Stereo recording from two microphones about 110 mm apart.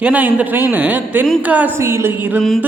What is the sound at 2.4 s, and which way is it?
Speech, centre (ahead or behind).